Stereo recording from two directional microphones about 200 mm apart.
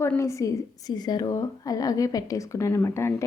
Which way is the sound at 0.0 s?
15° left (ahead or behind).